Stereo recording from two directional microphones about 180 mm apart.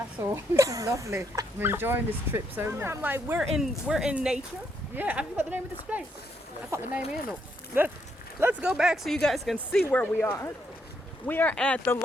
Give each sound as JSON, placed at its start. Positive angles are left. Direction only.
{"t": 0.5, "sound": "speech", "side_deg": -20}
{"t": 8.4, "sound": "speech", "side_deg": -10}